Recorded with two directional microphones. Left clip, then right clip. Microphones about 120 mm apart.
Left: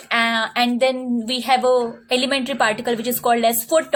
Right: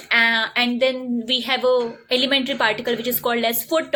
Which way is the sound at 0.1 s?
30° left (ahead or behind).